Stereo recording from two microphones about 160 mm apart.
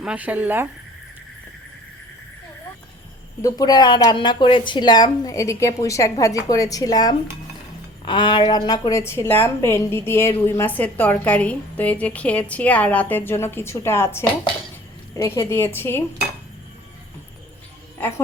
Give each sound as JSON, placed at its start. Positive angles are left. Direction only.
{"t": 0.0, "sound": "speech", "side_deg": -10}
{"t": 3.4, "sound": "a woman's voice", "side_deg": 25}